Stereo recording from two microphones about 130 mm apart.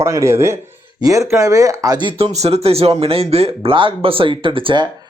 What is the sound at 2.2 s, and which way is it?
Speech, 55° right (ahead or behind).